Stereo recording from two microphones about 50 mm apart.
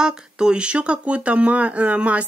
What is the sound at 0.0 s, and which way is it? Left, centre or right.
Speech, centre.